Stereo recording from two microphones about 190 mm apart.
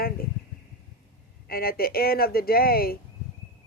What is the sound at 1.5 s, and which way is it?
Speech, 50° left (ahead or behind).